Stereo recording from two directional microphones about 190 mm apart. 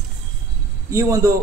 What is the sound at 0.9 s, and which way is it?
Speech, 15° right (ahead or behind).